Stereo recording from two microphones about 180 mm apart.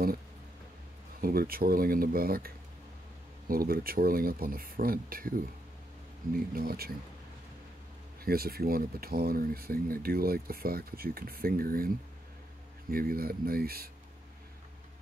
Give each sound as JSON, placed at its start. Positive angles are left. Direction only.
{"t": 1.2, "sound": "speech", "side_deg": -55}
{"t": 8.3, "sound": "speech", "side_deg": -55}
{"t": 12.9, "sound": "speech", "side_deg": -55}